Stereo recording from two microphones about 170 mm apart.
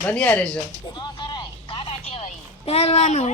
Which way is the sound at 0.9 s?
25° left (ahead or behind).